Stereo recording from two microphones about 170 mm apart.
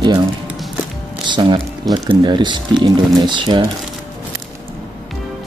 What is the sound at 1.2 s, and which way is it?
Speech, 25° right (ahead or behind).